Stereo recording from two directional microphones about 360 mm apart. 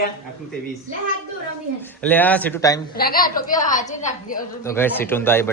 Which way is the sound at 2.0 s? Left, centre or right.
Centre.